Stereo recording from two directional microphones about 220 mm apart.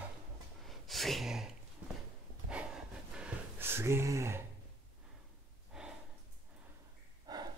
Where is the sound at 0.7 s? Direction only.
Centre (ahead or behind).